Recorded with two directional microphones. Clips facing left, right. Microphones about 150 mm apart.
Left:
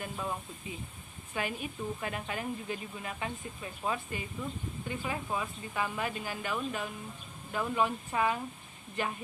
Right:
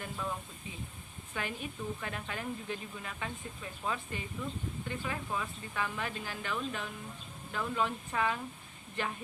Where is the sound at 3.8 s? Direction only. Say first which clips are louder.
Left 3 dB; 10° left (ahead or behind).